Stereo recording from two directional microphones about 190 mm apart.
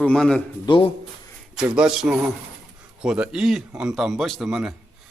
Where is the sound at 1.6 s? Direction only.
5° right (ahead or behind).